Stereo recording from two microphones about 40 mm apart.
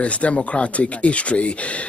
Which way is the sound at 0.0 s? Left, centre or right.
Left.